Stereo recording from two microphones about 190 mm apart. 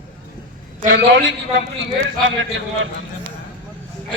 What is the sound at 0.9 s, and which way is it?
Speech, 75° right (ahead or behind).